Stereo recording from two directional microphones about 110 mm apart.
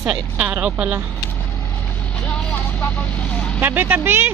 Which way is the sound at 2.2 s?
15° left (ahead or behind).